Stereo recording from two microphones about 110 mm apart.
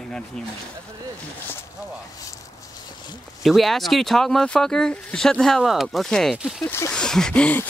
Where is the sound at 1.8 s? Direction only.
30° left (ahead or behind).